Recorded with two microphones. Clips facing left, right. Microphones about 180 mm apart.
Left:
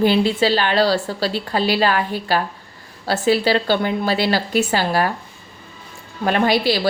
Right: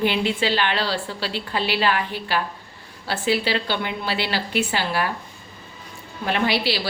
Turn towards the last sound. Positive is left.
turn(degrees=45)  # may be behind; listen again after turning